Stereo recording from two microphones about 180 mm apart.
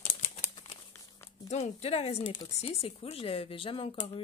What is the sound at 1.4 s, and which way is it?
Speech, 40° left (ahead or behind).